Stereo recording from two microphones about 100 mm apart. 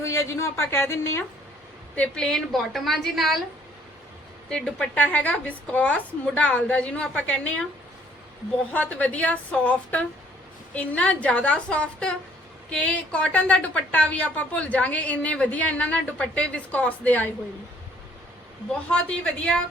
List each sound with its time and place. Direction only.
0.0 s a woman's voice: 30° left (ahead or behind)
2.0 s a woman's voice: 5° left (ahead or behind)
4.4 s a woman's voice: 10° left (ahead or behind)
8.7 s a woman's voice: 15° left (ahead or behind)
18.7 s a woman's voice: 10° left (ahead or behind)